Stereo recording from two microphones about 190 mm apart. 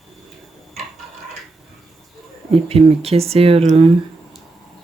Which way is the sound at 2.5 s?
30° right (ahead or behind).